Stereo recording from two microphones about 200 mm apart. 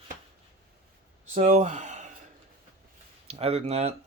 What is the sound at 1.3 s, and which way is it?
Speech, 35° right (ahead or behind).